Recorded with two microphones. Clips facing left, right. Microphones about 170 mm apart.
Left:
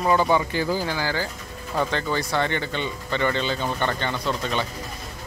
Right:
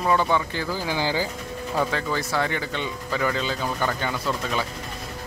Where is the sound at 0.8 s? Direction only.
15° right (ahead or behind).